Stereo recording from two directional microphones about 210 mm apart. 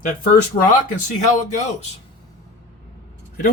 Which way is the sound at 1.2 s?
35° left (ahead or behind).